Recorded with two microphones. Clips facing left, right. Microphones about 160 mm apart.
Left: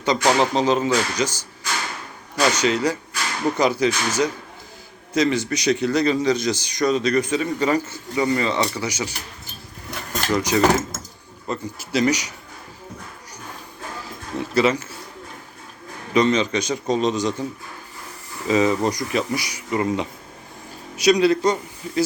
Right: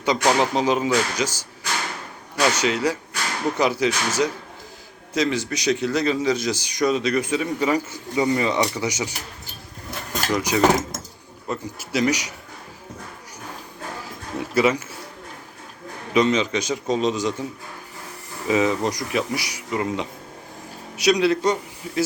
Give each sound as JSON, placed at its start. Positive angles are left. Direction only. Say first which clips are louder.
{"t": 0.0, "sound": "a man's voice", "louder": "left 1 dB", "side_deg": -10}
{"t": 10.2, "sound": "a man's voice", "louder": "left 1 dB", "side_deg": -10}
{"t": 14.5, "sound": "a man's voice", "louder": "even", "side_deg": -10}
{"t": 16.1, "sound": "speech", "louder": "left 1 dB", "side_deg": -5}
{"t": 18.4, "sound": "a man's voice", "louder": "left 2 dB", "side_deg": -5}